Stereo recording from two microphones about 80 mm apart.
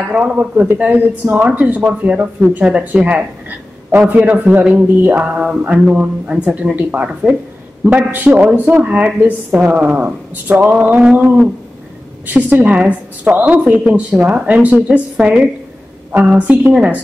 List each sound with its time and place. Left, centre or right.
0.1 s speech: centre